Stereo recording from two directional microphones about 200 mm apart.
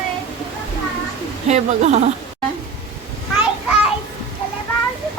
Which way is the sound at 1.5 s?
35° right (ahead or behind).